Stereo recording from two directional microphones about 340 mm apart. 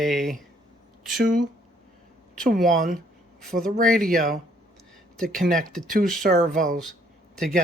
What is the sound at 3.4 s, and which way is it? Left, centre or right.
Speech, centre.